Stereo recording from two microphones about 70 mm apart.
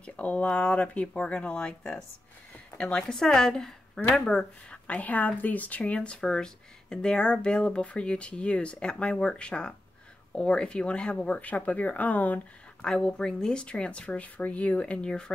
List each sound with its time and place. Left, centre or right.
0.0 s a woman's voice: centre
12.8 s a woman's voice: centre